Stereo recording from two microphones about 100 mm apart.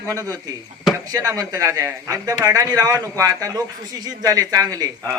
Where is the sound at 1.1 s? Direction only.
40° right (ahead or behind).